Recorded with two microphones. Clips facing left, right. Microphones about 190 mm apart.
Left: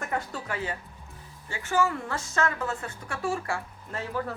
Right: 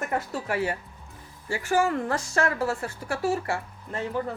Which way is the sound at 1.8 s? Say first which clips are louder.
Right 1 dB; 35° right (ahead or behind).